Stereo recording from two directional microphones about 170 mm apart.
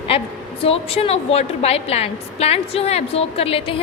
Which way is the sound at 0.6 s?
35° left (ahead or behind).